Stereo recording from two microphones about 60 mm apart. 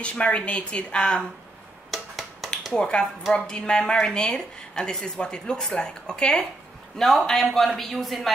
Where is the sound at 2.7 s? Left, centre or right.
Centre.